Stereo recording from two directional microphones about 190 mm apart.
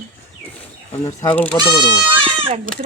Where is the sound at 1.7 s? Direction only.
25° left (ahead or behind).